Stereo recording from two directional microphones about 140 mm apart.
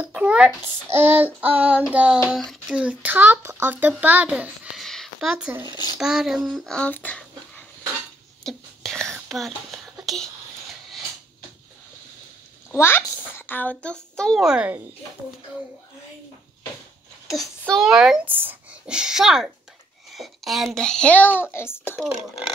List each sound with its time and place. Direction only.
0.0 s a child's voice: 10° right (ahead or behind)
0.6 s child singing: 15° right (ahead or behind)
4.8 s a sound: centre (ahead or behind)
5.9 s a child's voice: 5° right (ahead or behind)
8.5 s whispering: 5° left (ahead or behind)
12.7 s a child's voice: 15° left (ahead or behind); by 14.8 s 5° right (ahead or behind)
17.3 s a child's voice: centre (ahead or behind)